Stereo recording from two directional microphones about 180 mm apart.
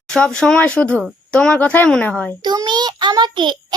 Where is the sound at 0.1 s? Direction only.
Centre (ahead or behind).